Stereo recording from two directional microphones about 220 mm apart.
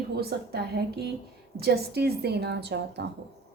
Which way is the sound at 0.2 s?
45° right (ahead or behind).